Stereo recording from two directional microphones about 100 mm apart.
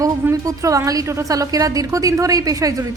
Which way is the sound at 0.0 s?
35° right (ahead or behind).